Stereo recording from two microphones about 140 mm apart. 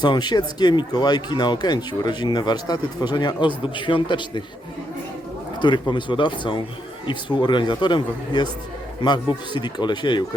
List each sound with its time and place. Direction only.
0.0 s speech: 30° left (ahead or behind)
5.5 s speech: 35° left (ahead or behind)